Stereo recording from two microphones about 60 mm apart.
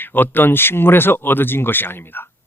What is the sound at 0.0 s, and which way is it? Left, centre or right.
Speech, left.